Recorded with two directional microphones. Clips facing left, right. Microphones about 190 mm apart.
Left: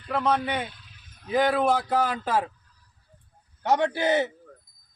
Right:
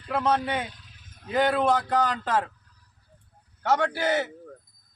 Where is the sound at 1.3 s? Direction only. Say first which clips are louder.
Even; centre (ahead or behind).